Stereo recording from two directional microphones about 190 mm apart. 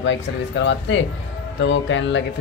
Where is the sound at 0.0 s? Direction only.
70° left (ahead or behind).